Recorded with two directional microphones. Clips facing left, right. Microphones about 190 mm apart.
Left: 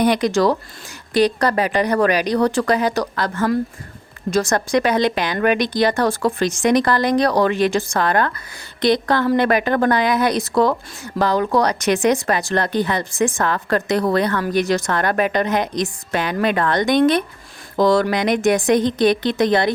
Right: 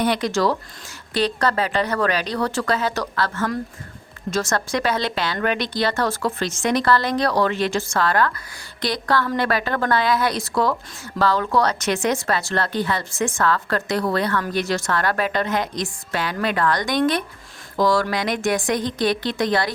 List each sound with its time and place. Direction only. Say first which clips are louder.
0.0 s a woman's voice: left 4 dB; 15° left (ahead or behind)